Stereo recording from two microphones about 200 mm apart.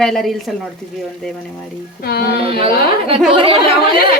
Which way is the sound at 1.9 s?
50° left (ahead or behind).